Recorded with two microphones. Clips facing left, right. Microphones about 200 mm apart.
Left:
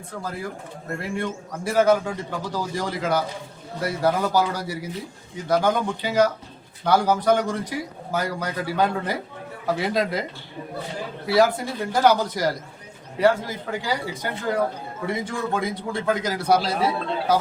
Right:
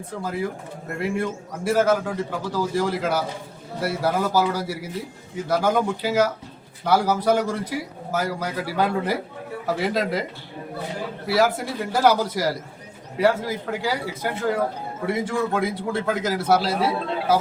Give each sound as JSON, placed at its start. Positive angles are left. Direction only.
{"t": 1.1, "sound": "a man's voice", "side_deg": -5}
{"t": 11.3, "sound": "a man's voice", "side_deg": -5}